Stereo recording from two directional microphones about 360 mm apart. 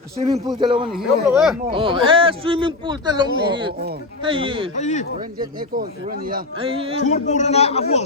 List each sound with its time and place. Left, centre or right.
0.6 s speech: centre
0.9 s speech: centre
1.7 s speech: centre
4.8 s speech: centre
5.5 s speech: right
7.0 s a man's voice: centre